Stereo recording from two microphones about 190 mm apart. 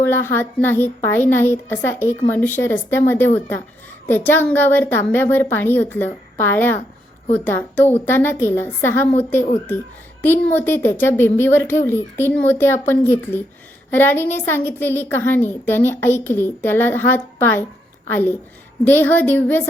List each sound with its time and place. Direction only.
0.0 s a woman's voice: 10° left (ahead or behind)